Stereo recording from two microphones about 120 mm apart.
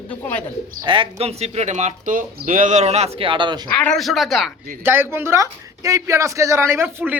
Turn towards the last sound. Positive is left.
turn(degrees=-15)  # may be behind; listen again after turning